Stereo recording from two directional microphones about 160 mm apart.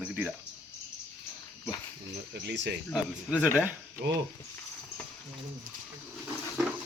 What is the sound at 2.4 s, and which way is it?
Speech, 90° right.